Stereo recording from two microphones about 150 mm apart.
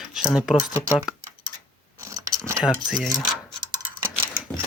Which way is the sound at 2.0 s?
20° right (ahead or behind).